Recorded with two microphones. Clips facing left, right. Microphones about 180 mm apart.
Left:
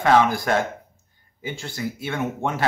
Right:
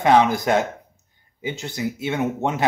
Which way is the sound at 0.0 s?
20° right (ahead or behind).